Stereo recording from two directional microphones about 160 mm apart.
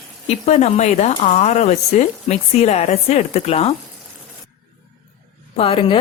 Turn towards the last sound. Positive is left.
turn(degrees=35)  # may be behind; listen again after turning